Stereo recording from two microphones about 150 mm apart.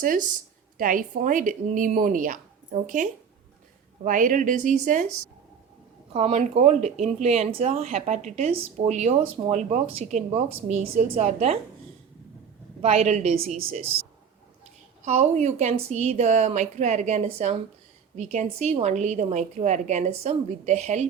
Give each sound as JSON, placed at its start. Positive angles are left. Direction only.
{"t": 0.0, "sound": "a woman's voice", "side_deg": -65}
{"t": 6.1, "sound": "speech", "side_deg": -45}
{"t": 12.8, "sound": "speech", "side_deg": -40}
{"t": 15.0, "sound": "speech", "side_deg": -50}